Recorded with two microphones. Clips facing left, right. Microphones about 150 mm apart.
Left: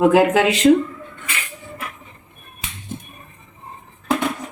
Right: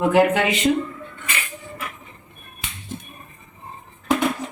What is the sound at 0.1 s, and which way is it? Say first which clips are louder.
Speech: left 2 dB; 90° left.